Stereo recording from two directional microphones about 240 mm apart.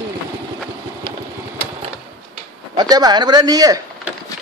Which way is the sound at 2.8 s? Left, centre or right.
Centre.